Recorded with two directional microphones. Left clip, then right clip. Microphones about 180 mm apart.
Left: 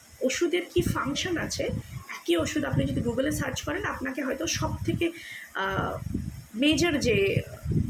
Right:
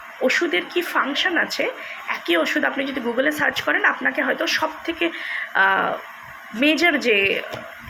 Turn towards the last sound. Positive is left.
turn(degrees=15)  # may be behind; listen again after turning